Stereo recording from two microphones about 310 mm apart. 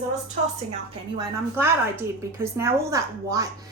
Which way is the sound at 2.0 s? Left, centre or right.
Centre.